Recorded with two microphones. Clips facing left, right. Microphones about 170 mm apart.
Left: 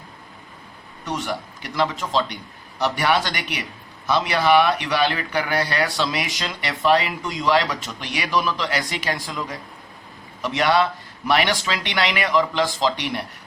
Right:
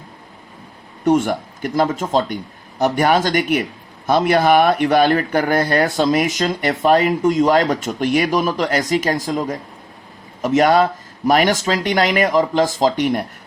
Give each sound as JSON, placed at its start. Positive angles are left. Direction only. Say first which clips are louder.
{"t": 1.0, "sound": "speech", "louder": "right 12 dB", "side_deg": -50}